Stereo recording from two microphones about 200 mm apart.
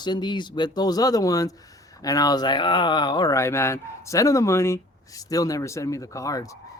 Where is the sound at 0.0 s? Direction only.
20° left (ahead or behind).